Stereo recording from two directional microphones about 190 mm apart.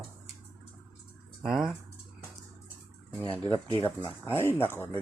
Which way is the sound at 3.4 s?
25° right (ahead or behind).